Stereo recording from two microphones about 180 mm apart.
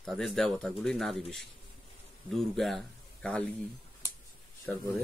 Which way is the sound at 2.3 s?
Centre (ahead or behind).